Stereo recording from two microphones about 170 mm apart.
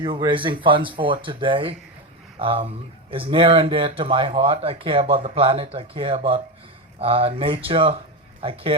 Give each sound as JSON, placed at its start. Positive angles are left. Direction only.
{"t": 0.0, "sound": "speech", "side_deg": -30}